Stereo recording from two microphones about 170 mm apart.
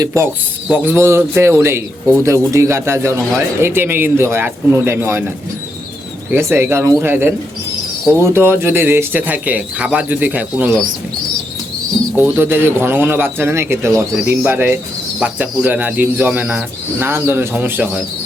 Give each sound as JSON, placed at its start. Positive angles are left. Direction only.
{"t": 0.0, "sound": "a man's voice", "side_deg": -15}
{"t": 6.3, "sound": "a man's voice", "side_deg": -15}
{"t": 12.1, "sound": "a man's voice", "side_deg": -10}